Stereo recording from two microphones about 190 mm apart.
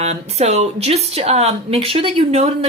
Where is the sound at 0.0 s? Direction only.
35° right (ahead or behind).